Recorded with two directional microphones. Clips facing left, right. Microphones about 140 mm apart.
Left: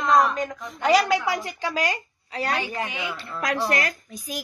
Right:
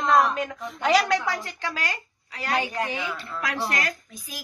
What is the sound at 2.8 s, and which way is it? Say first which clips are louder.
Speech: right 1 dB; 40° right (ahead or behind).